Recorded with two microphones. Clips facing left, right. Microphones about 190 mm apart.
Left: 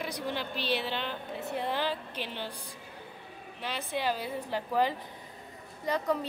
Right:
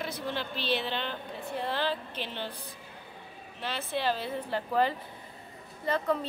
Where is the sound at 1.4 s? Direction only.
20° left (ahead or behind).